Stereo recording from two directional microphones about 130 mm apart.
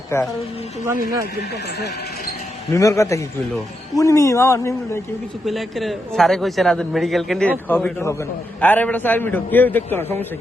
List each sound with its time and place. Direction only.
0.1 s speech: 20° left (ahead or behind)
2.7 s speech: 25° left (ahead or behind)
5.5 s a man's voice: centre (ahead or behind); by 10.2 s 15° left (ahead or behind)